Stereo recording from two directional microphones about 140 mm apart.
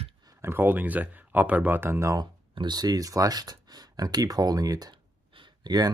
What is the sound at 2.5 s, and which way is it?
Speech, 30° right (ahead or behind).